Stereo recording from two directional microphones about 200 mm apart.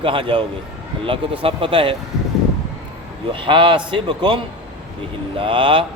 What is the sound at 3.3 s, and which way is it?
Speech, 25° right (ahead or behind).